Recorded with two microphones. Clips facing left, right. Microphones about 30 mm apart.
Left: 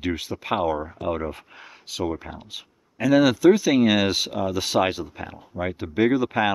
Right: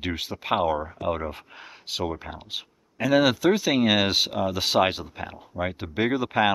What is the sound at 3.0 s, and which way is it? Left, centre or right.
Speech, centre.